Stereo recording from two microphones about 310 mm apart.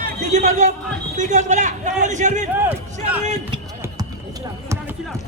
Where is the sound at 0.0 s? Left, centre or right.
Right.